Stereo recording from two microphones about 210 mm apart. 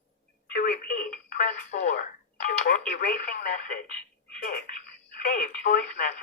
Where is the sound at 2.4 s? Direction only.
40° left (ahead or behind).